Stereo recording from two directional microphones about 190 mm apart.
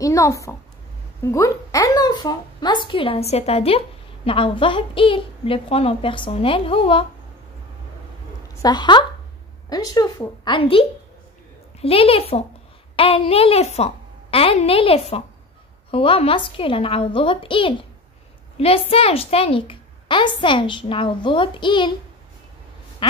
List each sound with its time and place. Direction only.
0.0 s a woman's voice: 15° left (ahead or behind)
8.6 s a woman's voice: 25° left (ahead or behind)